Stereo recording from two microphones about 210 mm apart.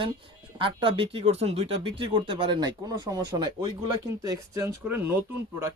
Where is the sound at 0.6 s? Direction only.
25° right (ahead or behind).